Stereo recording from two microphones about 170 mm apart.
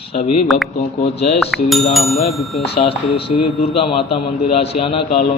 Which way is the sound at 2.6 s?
35° left (ahead or behind).